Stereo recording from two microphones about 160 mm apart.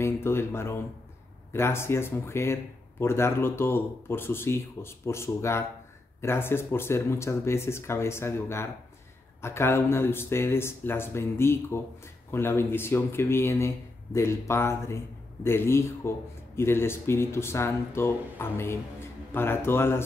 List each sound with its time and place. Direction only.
0.0 s speech: 15° left (ahead or behind)